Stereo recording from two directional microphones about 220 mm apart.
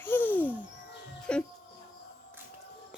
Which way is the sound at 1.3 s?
5° left (ahead or behind).